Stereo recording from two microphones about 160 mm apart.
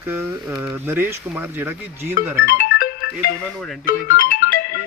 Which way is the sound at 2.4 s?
70° left (ahead or behind).